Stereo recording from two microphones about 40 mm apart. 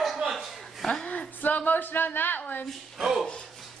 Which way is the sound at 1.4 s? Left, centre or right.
Left.